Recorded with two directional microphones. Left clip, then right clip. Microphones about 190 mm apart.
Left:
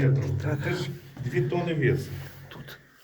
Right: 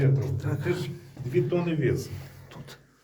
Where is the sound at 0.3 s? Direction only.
5° right (ahead or behind).